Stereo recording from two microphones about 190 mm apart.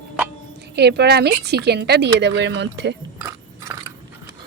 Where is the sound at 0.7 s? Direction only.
60° right (ahead or behind).